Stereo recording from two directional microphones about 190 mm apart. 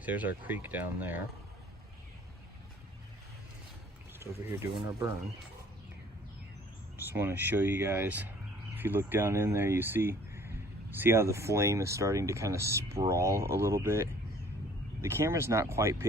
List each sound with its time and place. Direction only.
0.0 s speech: 10° right (ahead or behind)
4.2 s speech: 15° right (ahead or behind)
7.1 s speech: 10° right (ahead or behind)